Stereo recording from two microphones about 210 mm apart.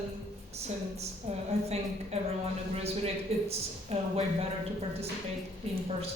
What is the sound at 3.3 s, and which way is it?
Speech, 30° right (ahead or behind).